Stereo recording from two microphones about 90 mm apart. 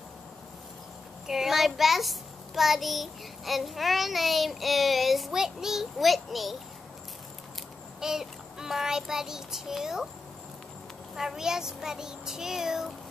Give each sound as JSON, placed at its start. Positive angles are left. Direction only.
{"t": 1.2, "sound": "a child's voice", "side_deg": -5}
{"t": 8.0, "sound": "a child's voice", "side_deg": -5}
{"t": 11.1, "sound": "a child's voice", "side_deg": -5}